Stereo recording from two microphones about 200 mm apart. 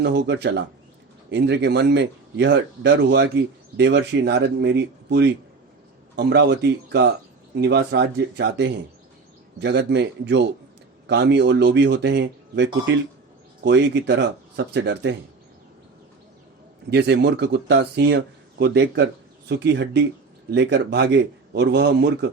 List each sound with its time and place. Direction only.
0.0 s speech: 55° right (ahead or behind)
16.9 s speech: 60° right (ahead or behind)